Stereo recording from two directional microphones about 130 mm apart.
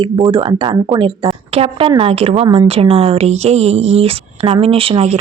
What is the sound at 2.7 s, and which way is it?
Speech, 45° right (ahead or behind).